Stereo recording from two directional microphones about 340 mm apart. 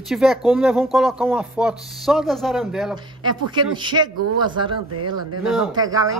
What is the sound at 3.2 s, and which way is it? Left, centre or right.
A woman's voice, centre.